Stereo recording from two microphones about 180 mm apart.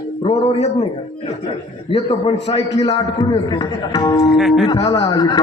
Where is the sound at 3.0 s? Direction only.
25° left (ahead or behind).